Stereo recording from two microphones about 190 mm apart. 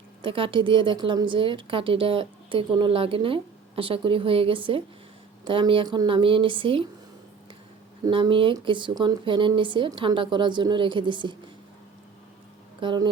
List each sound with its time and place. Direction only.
0.2 s a woman's voice: 30° right (ahead or behind)
8.0 s a woman's voice: 25° right (ahead or behind)
12.8 s a woman's voice: 25° right (ahead or behind)